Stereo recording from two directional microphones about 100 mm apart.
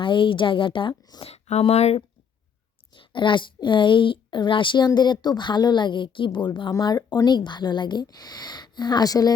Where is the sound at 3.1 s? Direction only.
55° left (ahead or behind).